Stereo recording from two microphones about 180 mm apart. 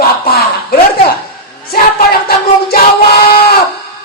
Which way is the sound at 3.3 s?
60° left (ahead or behind).